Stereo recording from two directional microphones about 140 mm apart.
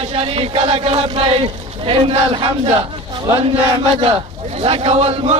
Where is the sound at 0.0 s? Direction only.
45° right (ahead or behind).